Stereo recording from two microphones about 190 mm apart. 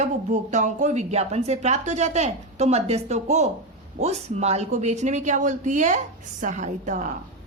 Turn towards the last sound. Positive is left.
turn(degrees=-40)  # may be behind; listen again after turning